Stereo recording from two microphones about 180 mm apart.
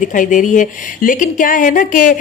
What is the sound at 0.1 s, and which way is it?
Speech, 45° left (ahead or behind).